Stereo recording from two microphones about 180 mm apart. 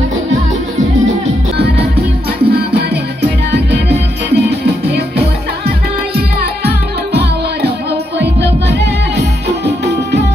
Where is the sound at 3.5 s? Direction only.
65° right (ahead or behind).